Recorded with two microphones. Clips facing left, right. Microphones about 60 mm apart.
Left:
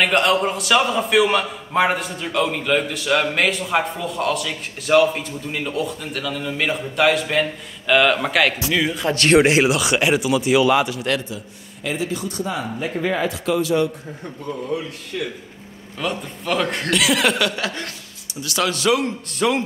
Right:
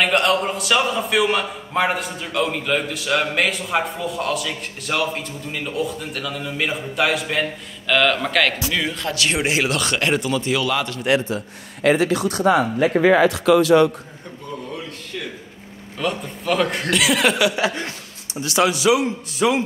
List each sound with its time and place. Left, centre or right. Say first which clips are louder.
0.0 s a man's voice: left 1 dB; centre
9.1 s speech: left 9 dB; left
9.7 s speech: left 3 dB; centre
11.2 s speech: right 6 dB; right
15.1 s a man's voice: left 5 dB; centre; by 18.7 s right
18.7 s a man's voice: right 2 dB; centre